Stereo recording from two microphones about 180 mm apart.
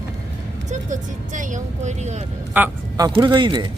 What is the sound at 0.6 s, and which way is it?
Speech, 45° right (ahead or behind).